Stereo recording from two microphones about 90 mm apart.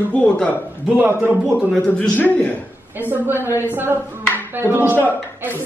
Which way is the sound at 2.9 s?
20° right (ahead or behind).